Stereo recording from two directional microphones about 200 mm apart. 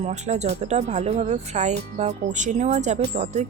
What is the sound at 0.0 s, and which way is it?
Speech, 35° right (ahead or behind).